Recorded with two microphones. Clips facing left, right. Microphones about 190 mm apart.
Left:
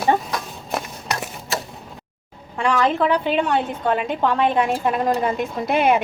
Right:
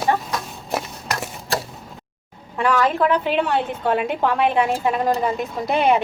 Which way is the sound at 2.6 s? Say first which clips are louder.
Even; 5° right (ahead or behind).